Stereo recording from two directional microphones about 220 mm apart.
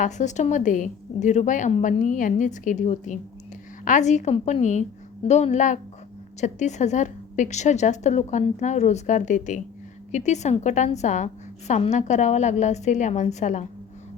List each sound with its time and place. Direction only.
0.0 s a woman's voice: 35° left (ahead or behind)